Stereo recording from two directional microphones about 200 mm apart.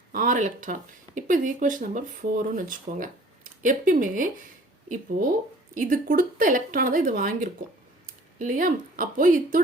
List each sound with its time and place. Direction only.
0.1 s speech: 40° right (ahead or behind)
5.7 s speech: 40° right (ahead or behind)